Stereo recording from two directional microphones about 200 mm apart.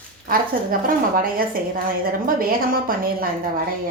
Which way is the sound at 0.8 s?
45° right (ahead or behind).